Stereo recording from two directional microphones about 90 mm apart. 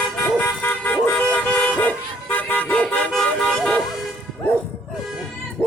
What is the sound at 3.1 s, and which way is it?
Vehicle, 5° left (ahead or behind).